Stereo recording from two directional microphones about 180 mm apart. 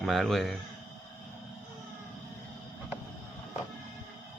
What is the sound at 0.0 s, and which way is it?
Speech, centre (ahead or behind).